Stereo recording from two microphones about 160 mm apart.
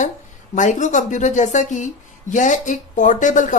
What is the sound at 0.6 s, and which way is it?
Speech, 50° left (ahead or behind).